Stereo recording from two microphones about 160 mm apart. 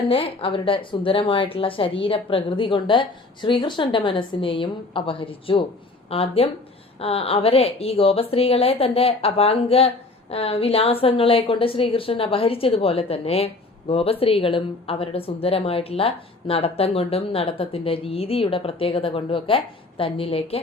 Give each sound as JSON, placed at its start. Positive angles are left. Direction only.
{"t": 0.1, "sound": "a woman's voice", "side_deg": 35}